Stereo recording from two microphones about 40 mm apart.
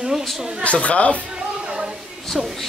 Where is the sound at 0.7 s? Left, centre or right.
Left.